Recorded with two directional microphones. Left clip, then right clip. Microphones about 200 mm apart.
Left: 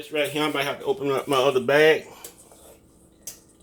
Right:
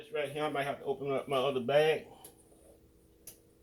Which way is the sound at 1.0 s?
35° left (ahead or behind).